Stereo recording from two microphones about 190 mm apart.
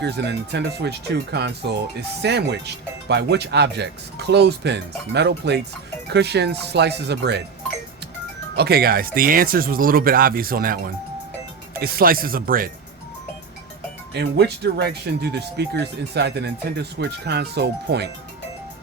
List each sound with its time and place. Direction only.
0.0 s speech: 65° right (ahead or behind)
8.5 s speech: 55° right (ahead or behind)
11.8 s speech: 50° right (ahead or behind)
14.1 s speech: 60° right (ahead or behind)